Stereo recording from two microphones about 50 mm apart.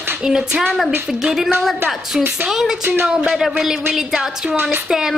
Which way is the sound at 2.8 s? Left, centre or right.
Right.